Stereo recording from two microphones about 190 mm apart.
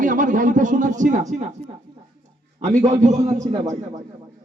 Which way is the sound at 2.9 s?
35° right (ahead or behind).